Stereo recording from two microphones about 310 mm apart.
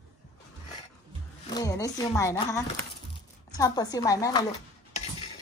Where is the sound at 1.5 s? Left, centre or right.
Centre.